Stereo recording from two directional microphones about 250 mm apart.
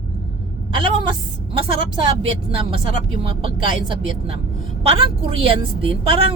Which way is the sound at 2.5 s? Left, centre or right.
Right.